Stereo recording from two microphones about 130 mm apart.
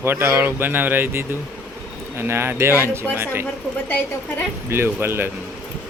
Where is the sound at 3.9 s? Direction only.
15° left (ahead or behind).